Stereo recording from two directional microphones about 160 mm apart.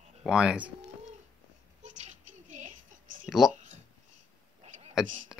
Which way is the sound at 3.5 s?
50° right (ahead or behind).